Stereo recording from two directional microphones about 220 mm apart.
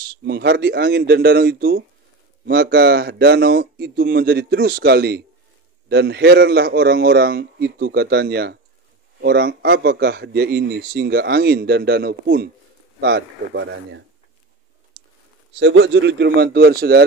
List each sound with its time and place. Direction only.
0.2 s a man's voice: 45° right (ahead or behind)
15.6 s a man's voice: 55° right (ahead or behind)